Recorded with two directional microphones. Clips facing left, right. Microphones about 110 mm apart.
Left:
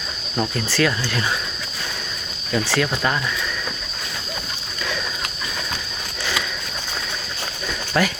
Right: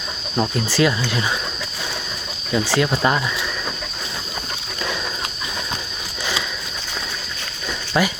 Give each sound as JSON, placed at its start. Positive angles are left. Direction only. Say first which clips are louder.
{"t": 0.3, "sound": "speech", "louder": "right 2 dB", "side_deg": -20}
{"t": 2.5, "sound": "speech", "louder": "right 2 dB", "side_deg": -15}
{"t": 7.9, "sound": "speech", "louder": "right 1 dB", "side_deg": -10}